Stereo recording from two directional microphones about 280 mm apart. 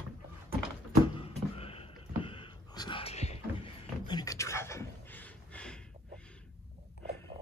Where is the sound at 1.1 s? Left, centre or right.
Left; by 5.8 s centre.